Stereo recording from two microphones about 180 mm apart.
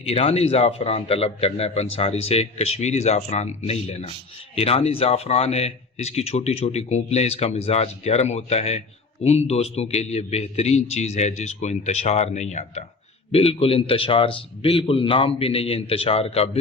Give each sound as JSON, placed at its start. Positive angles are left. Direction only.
{"t": 0.0, "sound": "speech", "side_deg": 35}